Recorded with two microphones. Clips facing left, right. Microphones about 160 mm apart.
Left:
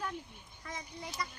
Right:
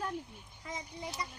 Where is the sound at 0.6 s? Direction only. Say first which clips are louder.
Right 2 dB; 20° right (ahead or behind).